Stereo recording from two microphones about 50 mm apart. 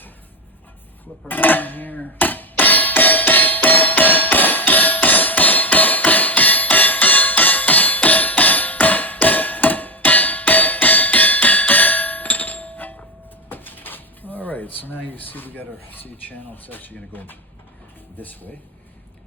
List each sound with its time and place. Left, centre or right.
1.3 s music: left
13.5 s a sound: left
18.2 s speech: left